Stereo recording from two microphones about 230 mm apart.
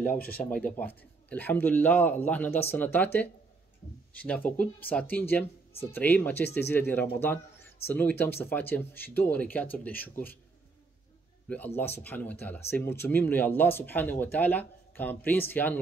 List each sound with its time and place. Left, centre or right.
0.4 s speech: centre
11.4 s speech: centre